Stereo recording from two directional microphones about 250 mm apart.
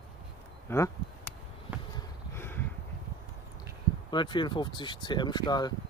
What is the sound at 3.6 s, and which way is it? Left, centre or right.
Speech, centre.